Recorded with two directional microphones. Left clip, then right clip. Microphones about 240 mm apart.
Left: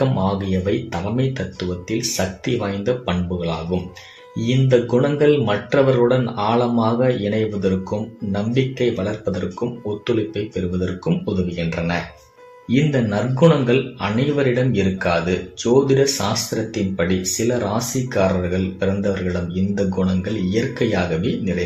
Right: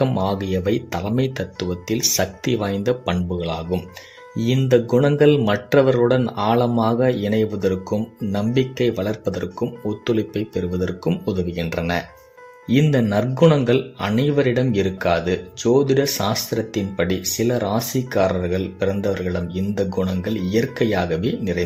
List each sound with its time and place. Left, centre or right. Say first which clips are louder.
0.0 s speech: even; right
10.7 s speech: even; right